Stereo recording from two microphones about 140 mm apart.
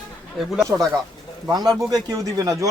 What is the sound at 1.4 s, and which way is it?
Speech, 30° right (ahead or behind).